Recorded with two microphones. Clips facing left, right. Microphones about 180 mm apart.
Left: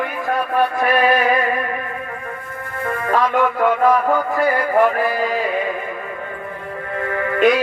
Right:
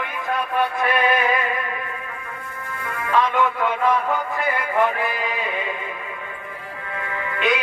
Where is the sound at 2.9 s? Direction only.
45° left (ahead or behind).